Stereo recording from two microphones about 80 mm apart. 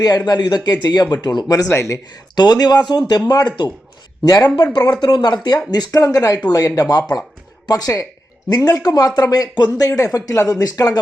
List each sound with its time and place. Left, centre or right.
0.3 s speech: left
1.7 s speech: left
2.0 s speech: left